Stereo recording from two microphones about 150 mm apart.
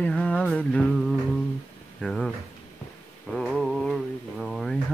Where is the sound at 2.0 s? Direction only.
Centre (ahead or behind).